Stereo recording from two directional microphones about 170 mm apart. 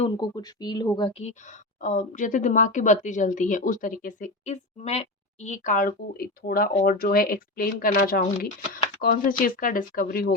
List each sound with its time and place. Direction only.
0.0 s speech: 25° left (ahead or behind)
1.8 s speech: 50° left (ahead or behind)